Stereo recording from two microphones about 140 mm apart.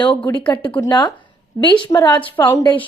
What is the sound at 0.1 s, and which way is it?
Speech, 10° left (ahead or behind).